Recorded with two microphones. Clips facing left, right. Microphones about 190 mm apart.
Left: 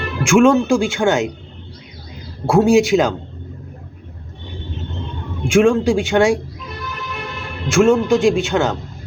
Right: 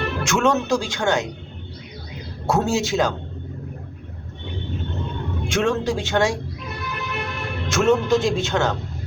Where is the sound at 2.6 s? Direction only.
15° left (ahead or behind).